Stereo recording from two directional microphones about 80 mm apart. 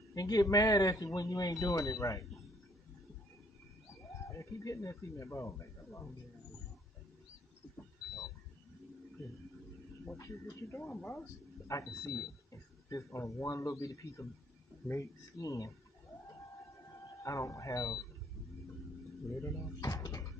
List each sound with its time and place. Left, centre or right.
0.1 s speech: left
4.3 s speech: left
7.7 s vehicle: left
10.1 s speech: left
17.2 s speech: left
19.2 s speech: left